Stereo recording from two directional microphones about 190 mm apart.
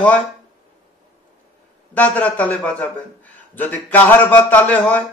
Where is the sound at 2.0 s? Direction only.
10° left (ahead or behind).